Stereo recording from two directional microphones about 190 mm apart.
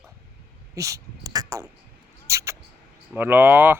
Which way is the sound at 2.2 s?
15° right (ahead or behind).